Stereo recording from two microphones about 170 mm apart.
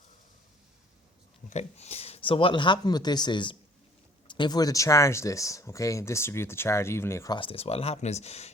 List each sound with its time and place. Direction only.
1.5 s speech: 40° left (ahead or behind); by 7.3 s 15° left (ahead or behind)
7.3 s speech: 35° left (ahead or behind)